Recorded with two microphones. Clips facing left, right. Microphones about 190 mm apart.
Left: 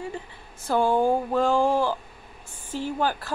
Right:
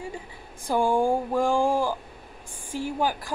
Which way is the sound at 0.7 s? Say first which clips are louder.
Left 1 dB; 10° right (ahead or behind).